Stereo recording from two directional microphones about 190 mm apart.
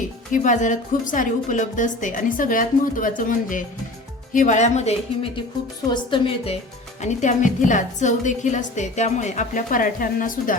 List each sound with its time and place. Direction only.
0.4 s a woman's voice: 40° left (ahead or behind)
7.0 s a woman's voice: 40° left (ahead or behind)